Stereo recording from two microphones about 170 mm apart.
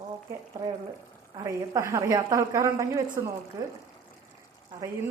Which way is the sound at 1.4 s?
20° right (ahead or behind).